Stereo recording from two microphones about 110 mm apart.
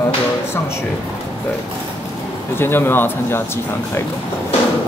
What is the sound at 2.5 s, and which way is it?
Speech, 20° left (ahead or behind).